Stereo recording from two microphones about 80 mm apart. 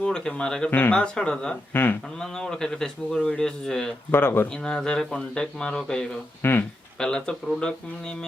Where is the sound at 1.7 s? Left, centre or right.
Left.